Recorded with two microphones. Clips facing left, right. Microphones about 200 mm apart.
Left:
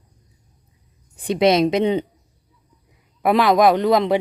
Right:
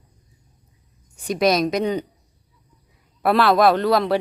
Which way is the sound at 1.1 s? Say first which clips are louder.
Left 3 dB; 30° left (ahead or behind).